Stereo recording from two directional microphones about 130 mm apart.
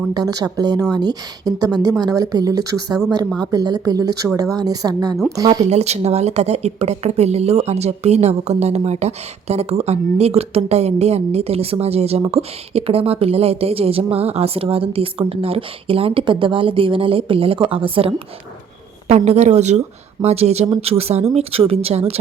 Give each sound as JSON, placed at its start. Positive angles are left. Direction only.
{"t": 0.1, "sound": "a woman's voice", "side_deg": -30}
{"t": 5.6, "sound": "a woman's voice", "side_deg": -55}
{"t": 19.0, "sound": "a woman's voice", "side_deg": -55}